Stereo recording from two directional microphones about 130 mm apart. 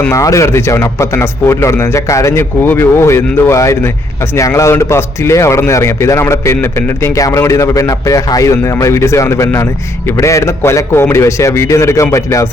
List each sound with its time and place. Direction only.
0.1 s a man's voice: 25° left (ahead or behind)